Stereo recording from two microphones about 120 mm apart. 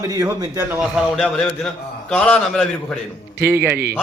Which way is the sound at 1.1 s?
10° left (ahead or behind).